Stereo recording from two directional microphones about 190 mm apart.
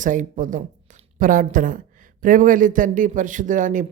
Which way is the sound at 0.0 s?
40° right (ahead or behind).